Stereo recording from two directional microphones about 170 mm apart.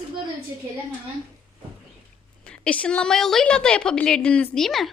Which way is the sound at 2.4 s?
5° left (ahead or behind).